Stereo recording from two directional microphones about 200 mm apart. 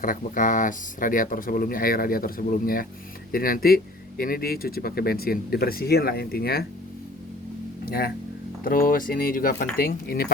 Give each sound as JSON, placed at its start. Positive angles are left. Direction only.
{"t": 0.0, "sound": "speech", "side_deg": 40}
{"t": 7.9, "sound": "speech", "side_deg": 50}